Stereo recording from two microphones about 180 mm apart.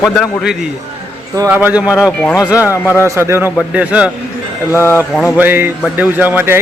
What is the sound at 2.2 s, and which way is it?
Speech, 10° left (ahead or behind).